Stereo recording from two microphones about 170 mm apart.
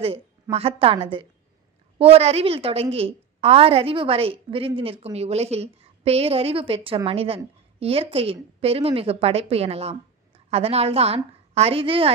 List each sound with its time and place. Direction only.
0.0 s a woman's voice: 35° right (ahead or behind)